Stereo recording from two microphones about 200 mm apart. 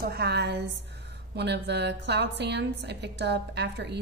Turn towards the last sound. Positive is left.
turn(degrees=-55)  # may be behind; listen again after turning